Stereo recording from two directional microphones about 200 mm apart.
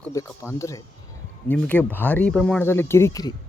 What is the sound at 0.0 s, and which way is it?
Speech, 15° left (ahead or behind).